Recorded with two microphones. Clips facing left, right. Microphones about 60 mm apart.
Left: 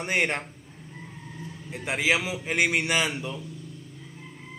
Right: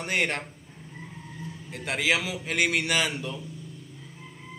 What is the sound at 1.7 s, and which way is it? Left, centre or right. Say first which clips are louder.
Speech: left 1 dB; centre.